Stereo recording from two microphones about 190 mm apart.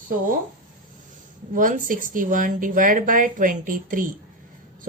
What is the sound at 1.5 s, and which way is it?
Speech, 45° right (ahead or behind).